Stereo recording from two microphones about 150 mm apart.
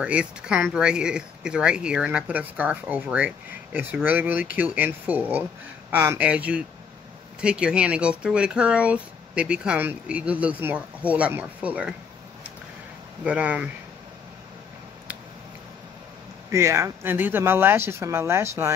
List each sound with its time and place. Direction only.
0.0 s speech: 5° right (ahead or behind)
13.2 s speech: 10° right (ahead or behind)
16.4 s speech: 20° right (ahead or behind)